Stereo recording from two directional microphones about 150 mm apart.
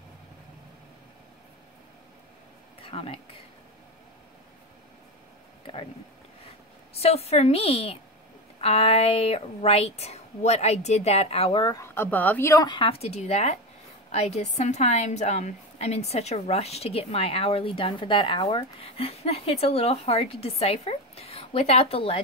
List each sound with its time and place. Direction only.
2.8 s speech: 40° left (ahead or behind)
7.0 s a woman's voice: 45° left (ahead or behind)
11.7 s a woman's voice: 15° left (ahead or behind); by 22.2 s 40° left (ahead or behind)